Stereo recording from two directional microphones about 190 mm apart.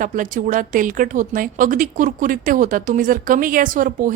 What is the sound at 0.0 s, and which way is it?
Speech, 45° right (ahead or behind).